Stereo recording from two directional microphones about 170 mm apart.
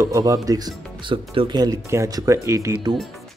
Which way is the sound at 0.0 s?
20° right (ahead or behind).